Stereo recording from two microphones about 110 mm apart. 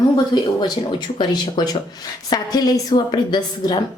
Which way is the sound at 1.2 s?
40° left (ahead or behind).